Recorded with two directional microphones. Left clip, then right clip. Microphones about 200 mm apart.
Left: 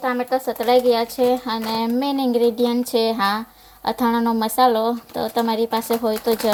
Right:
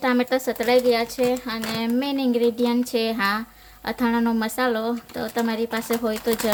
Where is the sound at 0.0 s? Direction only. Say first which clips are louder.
Left 1 dB; 25° right (ahead or behind).